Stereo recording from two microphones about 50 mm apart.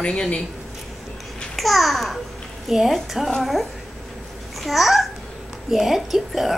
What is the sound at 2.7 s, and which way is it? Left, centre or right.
A woman's voice, centre.